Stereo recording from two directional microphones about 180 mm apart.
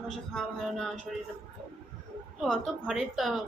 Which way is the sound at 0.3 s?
5° left (ahead or behind).